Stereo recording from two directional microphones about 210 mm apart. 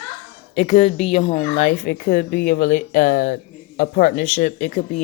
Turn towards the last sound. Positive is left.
turn(degrees=35)  # may be behind; listen again after turning